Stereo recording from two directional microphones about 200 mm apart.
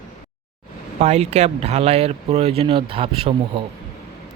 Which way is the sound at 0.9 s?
35° right (ahead or behind).